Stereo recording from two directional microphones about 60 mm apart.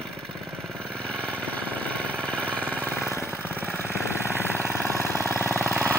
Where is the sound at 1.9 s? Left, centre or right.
Centre.